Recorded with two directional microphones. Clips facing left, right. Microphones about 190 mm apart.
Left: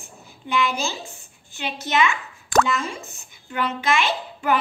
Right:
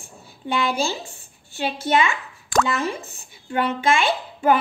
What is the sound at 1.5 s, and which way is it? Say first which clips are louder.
Speech: right 3 dB; 30° right (ahead or behind).